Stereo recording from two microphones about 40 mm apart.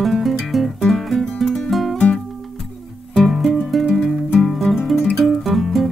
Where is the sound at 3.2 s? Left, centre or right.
Centre.